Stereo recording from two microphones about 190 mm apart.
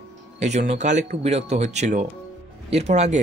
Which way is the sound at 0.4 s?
35° right (ahead or behind).